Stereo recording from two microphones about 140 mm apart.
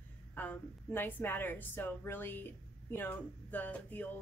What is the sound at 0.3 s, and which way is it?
A woman's voice, 10° left (ahead or behind).